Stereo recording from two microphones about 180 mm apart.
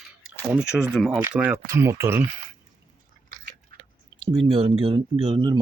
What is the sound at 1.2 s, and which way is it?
Speech, 10° right (ahead or behind).